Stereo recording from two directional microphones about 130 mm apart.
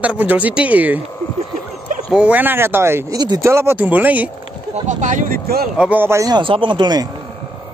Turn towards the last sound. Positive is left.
turn(degrees=-35)  # may be behind; listen again after turning